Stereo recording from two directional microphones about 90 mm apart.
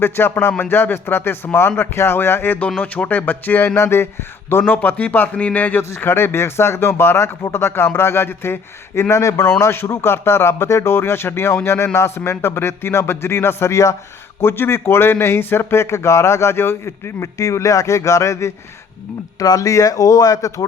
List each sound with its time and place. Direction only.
0.0 s a man's voice: 25° left (ahead or behind); by 20.7 s 40° left (ahead or behind)